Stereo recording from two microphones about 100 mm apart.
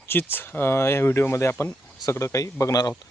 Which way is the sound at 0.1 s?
20° left (ahead or behind).